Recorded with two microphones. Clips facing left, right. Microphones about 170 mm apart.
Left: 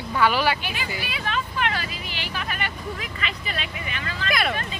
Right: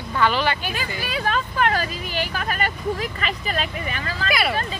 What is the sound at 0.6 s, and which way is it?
Speech, 45° right (ahead or behind).